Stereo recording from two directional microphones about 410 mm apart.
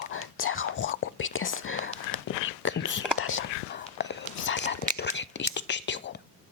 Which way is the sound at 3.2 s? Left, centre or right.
Left.